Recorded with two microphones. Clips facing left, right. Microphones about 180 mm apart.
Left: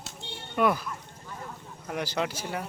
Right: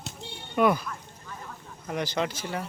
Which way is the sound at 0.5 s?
Centre (ahead or behind).